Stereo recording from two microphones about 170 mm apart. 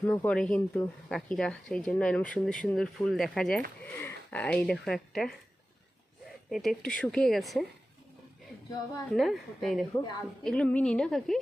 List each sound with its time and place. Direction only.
0.0 s speech: 10° left (ahead or behind)
6.5 s speech: centre (ahead or behind)
9.1 s speech: centre (ahead or behind)
9.9 s a woman's voice: 20° left (ahead or behind)
10.4 s speech: 5° left (ahead or behind)